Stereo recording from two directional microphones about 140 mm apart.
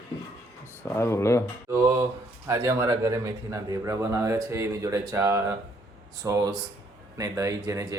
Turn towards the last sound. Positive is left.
turn(degrees=-20)  # may be behind; listen again after turning